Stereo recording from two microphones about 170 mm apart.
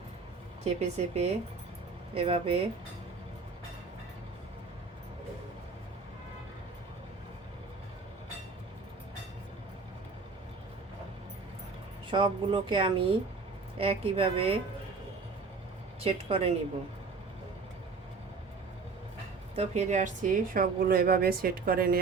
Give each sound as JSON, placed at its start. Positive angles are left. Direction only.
{"t": 0.6, "sound": "a woman's voice", "side_deg": -40}
{"t": 12.1, "sound": "a woman's voice", "side_deg": -30}
{"t": 16.0, "sound": "a woman's voice", "side_deg": -35}
{"t": 19.5, "sound": "a woman's voice", "side_deg": -40}